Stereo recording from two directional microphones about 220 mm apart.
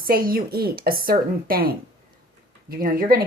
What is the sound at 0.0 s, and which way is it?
Speech, 40° right (ahead or behind).